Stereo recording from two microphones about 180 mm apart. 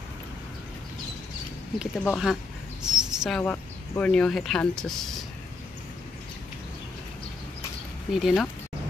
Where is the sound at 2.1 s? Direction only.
Centre (ahead or behind).